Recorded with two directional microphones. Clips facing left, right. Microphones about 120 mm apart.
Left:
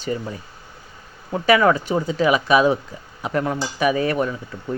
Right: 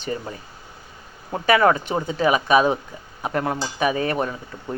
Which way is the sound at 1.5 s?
40° right (ahead or behind).